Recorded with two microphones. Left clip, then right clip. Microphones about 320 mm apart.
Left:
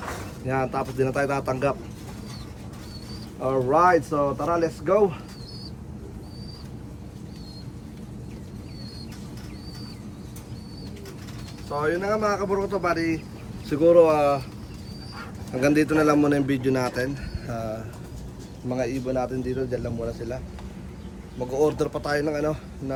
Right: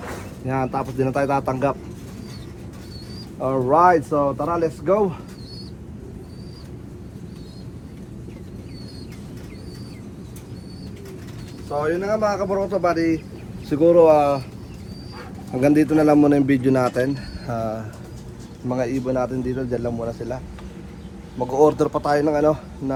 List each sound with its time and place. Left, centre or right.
0.4 s speech: centre
3.4 s speech: centre
11.7 s speech: centre
15.6 s speech: centre
21.6 s speech: centre